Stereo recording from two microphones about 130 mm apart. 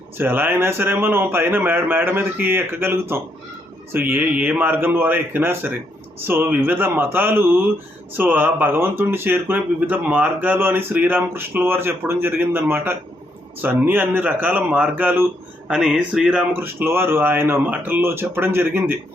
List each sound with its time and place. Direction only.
0.2 s a man's voice: 15° right (ahead or behind)